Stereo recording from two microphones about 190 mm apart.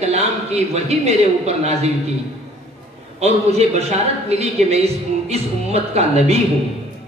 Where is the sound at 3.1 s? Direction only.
35° right (ahead or behind).